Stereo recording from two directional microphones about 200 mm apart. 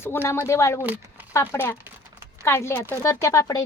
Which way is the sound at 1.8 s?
10° right (ahead or behind).